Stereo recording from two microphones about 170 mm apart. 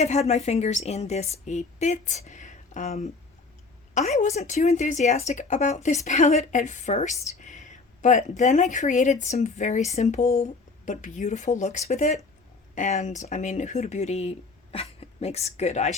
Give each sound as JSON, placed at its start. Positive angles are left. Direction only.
{"t": 0.0, "sound": "speech", "side_deg": 40}